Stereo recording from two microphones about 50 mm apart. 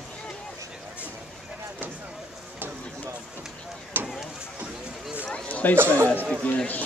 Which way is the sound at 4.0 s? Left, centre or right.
Right.